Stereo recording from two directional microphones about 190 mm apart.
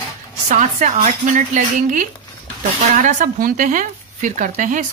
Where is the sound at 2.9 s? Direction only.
45° right (ahead or behind).